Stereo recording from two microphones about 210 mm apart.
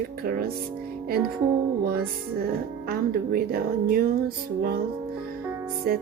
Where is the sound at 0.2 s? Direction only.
45° right (ahead or behind).